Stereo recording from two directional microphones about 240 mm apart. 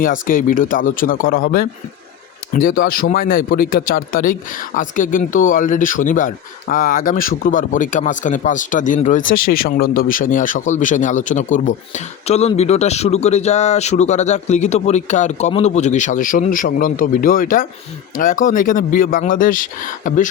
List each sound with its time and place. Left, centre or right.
0.0 s speech: left